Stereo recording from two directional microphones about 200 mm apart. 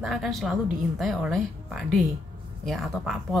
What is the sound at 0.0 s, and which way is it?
Speech, centre (ahead or behind).